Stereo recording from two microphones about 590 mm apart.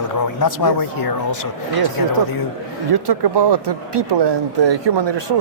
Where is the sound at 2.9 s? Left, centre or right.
Right.